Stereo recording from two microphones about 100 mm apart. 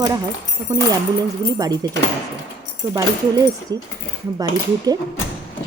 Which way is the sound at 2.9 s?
35° right (ahead or behind).